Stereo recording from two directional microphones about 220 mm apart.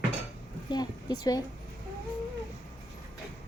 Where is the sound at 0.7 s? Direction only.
20° left (ahead or behind).